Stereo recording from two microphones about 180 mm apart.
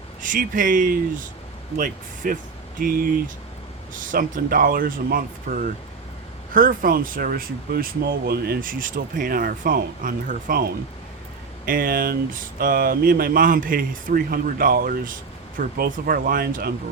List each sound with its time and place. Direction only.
0.2 s speech: 50° right (ahead or behind)